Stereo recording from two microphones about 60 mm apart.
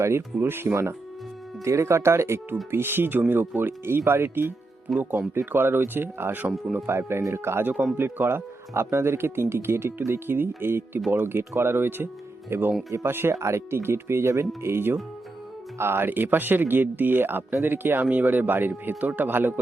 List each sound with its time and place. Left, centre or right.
0.0 s speech: right
0.3 s speech: right
7.2 s speech: right
7.6 s speech: right
7.9 s speech: right
13.4 s speech: right